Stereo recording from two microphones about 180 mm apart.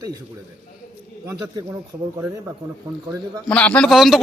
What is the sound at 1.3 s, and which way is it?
Speech, 20° right (ahead or behind).